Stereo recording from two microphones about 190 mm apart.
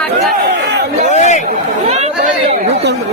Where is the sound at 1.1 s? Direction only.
35° left (ahead or behind).